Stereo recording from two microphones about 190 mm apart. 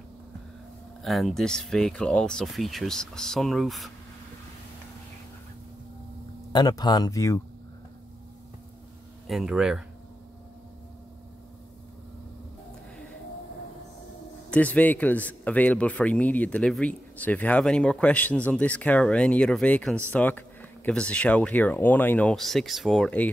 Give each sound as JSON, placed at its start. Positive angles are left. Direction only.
{"t": 1.0, "sound": "speech", "side_deg": 0}
{"t": 6.5, "sound": "speech", "side_deg": 20}
{"t": 9.3, "sound": "speech", "side_deg": 0}
{"t": 14.5, "sound": "a man's voice", "side_deg": 5}